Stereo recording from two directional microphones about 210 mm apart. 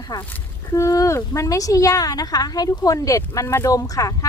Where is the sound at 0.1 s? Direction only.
20° left (ahead or behind).